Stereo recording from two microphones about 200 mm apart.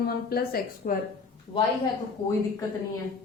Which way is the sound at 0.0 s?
50° left (ahead or behind).